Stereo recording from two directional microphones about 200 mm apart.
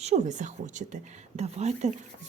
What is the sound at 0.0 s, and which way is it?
A child's voice, 35° right (ahead or behind).